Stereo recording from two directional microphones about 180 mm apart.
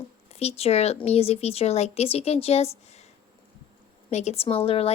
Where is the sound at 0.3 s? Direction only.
35° left (ahead or behind).